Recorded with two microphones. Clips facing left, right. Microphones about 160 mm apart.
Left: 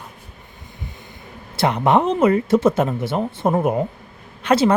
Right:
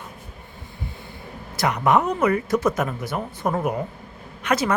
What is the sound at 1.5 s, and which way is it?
Speech, 30° left (ahead or behind).